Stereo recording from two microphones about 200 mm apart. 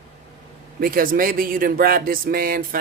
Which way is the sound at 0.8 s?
45° right (ahead or behind).